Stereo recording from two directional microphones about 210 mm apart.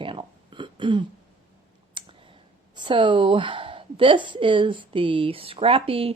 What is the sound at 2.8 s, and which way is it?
A woman's voice, 25° right (ahead or behind).